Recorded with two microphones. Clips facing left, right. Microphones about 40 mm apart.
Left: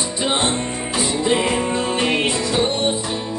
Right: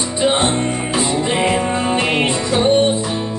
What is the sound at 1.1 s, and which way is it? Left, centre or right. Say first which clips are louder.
Music: even; centre.